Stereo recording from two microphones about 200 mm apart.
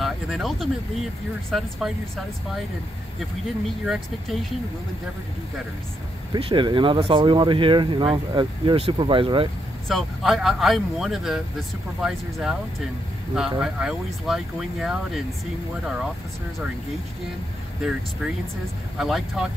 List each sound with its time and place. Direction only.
0.0 s a sound: centre (ahead or behind)
1.5 s speech: centre (ahead or behind)
3.8 s speech: centre (ahead or behind)
6.3 s speech: 25° right (ahead or behind)
9.8 s speech: centre (ahead or behind)
18.9 s speech: centre (ahead or behind)